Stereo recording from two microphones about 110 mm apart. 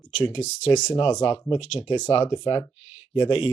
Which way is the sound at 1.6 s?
60° left (ahead or behind).